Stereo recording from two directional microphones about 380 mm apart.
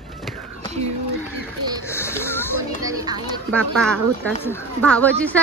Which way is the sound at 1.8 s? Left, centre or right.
Centre.